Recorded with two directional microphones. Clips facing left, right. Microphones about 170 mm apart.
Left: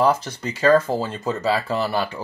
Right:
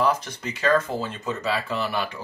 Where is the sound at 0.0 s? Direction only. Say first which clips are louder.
Left 4 dB; 30° left (ahead or behind).